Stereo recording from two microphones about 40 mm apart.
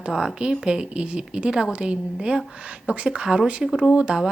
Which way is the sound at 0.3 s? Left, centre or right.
Right.